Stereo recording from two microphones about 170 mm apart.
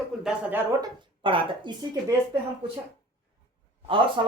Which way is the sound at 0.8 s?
30° right (ahead or behind).